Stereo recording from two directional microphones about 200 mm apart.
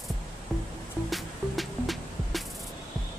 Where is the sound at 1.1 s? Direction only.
Centre (ahead or behind).